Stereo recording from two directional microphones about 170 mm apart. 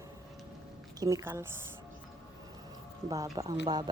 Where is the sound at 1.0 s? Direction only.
20° right (ahead or behind).